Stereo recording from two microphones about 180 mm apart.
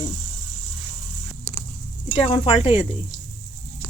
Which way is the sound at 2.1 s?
30° left (ahead or behind).